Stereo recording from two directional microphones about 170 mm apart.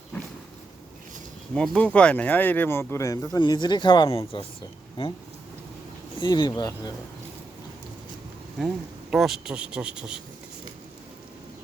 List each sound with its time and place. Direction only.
1.5 s speech: 5° left (ahead or behind); by 4.4 s 30° left (ahead or behind)
6.1 s speech: 25° left (ahead or behind)
8.5 s a man's voice: centre (ahead or behind)